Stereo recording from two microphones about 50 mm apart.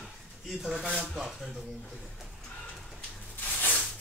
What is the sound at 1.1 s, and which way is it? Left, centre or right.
Speech, centre.